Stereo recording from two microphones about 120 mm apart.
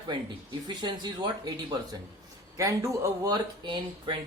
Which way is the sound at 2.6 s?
25° right (ahead or behind).